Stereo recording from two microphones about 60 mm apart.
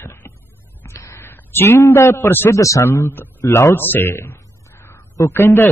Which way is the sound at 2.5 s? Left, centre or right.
Left.